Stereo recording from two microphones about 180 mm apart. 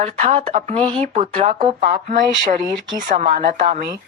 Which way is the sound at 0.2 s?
40° right (ahead or behind).